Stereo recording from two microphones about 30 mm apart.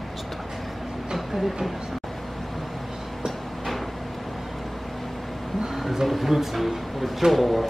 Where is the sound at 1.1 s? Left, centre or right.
Centre.